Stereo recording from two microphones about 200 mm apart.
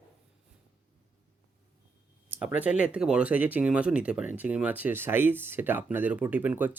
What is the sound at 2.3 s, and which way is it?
Speech, 5° right (ahead or behind).